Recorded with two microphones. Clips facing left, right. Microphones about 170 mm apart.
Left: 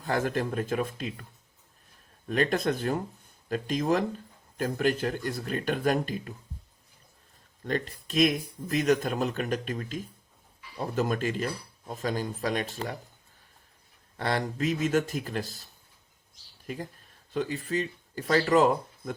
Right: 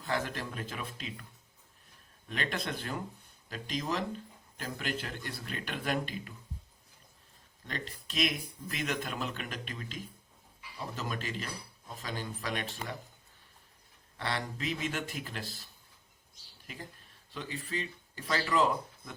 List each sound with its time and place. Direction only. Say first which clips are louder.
0.0 s speech: left 7 dB; 45° left (ahead or behind)
2.2 s speech: left 10 dB; 45° left (ahead or behind)
7.6 s speech: left 10 dB; 45° left (ahead or behind)
14.2 s speech: left 8 dB; 45° left (ahead or behind)
17.3 s speech: left 9 dB; 45° left (ahead or behind)